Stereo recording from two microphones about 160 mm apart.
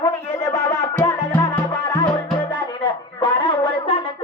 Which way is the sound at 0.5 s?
20° left (ahead or behind).